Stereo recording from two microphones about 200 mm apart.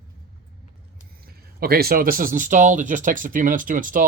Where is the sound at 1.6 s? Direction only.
50° right (ahead or behind).